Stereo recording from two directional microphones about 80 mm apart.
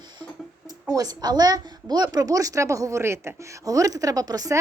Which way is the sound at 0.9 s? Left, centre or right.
Right.